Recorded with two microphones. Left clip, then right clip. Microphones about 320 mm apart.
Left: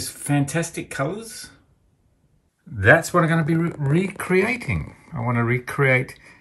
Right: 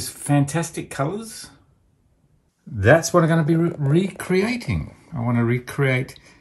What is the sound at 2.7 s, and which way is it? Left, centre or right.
Speech, centre.